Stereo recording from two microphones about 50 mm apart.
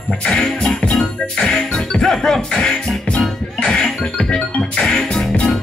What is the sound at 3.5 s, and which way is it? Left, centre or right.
Music, centre.